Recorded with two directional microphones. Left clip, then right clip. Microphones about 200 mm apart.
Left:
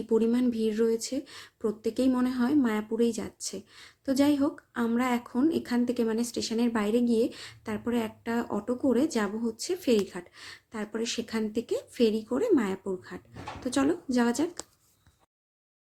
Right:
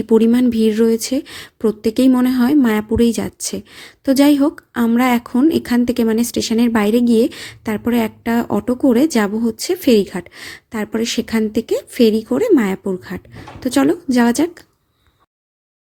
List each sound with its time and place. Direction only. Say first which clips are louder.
0.1 s speech: right 12 dB; 45° right (ahead or behind)